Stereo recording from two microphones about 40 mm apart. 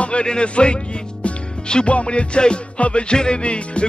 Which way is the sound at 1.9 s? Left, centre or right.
Left.